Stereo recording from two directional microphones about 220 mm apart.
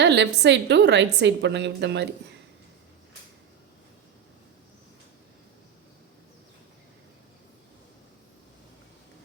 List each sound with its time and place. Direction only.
0.0 s a woman's voice: 50° right (ahead or behind)